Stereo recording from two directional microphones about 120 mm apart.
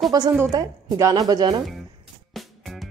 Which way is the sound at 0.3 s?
25° right (ahead or behind).